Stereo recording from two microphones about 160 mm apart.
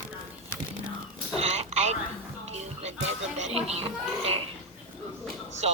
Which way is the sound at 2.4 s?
45° right (ahead or behind).